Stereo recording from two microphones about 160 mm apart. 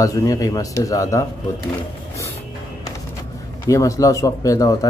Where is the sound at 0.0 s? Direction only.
20° left (ahead or behind).